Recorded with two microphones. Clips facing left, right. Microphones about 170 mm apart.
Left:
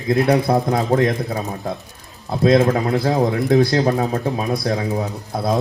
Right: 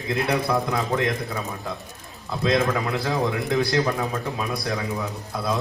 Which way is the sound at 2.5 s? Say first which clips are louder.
Left 7 dB; 40° left (ahead or behind).